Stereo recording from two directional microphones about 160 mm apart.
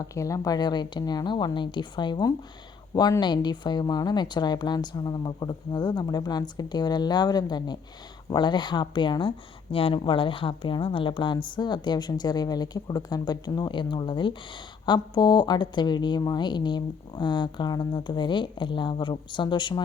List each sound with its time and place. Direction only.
0.0 s speech: 20° left (ahead or behind)